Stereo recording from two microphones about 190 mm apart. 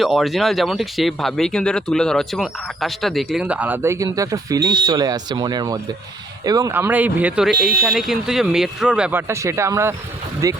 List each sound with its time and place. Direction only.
0.0 s speech: centre (ahead or behind); by 10.6 s 20° right (ahead or behind)